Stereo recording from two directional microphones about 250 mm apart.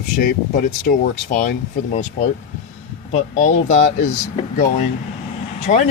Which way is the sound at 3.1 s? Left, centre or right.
Left.